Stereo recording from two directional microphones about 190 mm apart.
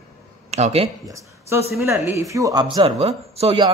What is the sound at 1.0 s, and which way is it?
A man's voice, 15° right (ahead or behind).